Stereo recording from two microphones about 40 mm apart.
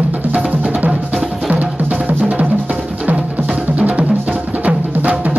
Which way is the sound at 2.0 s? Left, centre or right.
Right.